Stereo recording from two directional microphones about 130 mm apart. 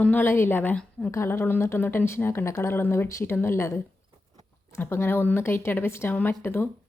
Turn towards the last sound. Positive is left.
turn(degrees=15)  # may be behind; listen again after turning